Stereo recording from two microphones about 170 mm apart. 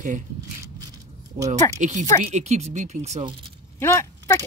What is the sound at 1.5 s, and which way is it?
Speech, 45° right (ahead or behind).